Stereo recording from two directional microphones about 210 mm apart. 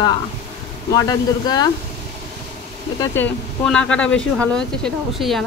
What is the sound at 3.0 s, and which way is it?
Speech, 10° left (ahead or behind).